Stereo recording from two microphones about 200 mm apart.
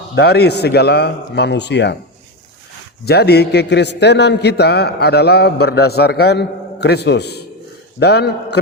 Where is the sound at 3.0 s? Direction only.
55° left (ahead or behind).